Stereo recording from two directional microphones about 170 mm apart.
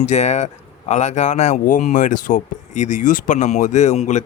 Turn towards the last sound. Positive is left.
turn(degrees=40)  # may be behind; listen again after turning